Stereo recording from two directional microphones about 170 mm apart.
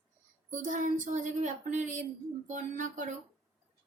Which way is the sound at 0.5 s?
50° right (ahead or behind).